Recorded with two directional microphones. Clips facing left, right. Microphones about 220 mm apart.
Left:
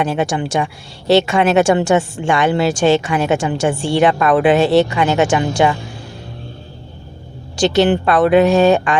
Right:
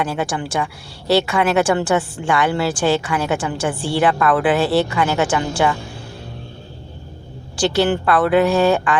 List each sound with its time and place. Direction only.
0.0 s a woman's voice: 20° left (ahead or behind)
7.5 s a woman's voice: 25° left (ahead or behind)